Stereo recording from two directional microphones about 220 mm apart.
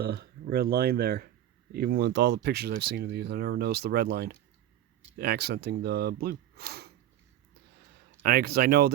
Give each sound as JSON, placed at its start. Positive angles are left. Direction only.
{"t": 0.0, "sound": "speech", "side_deg": -45}
{"t": 8.2, "sound": "speech", "side_deg": -45}